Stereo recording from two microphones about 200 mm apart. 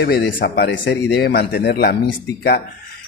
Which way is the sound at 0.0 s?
55° left (ahead or behind).